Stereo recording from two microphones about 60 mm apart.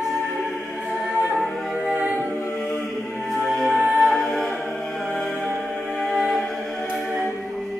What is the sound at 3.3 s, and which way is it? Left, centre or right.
Music, centre.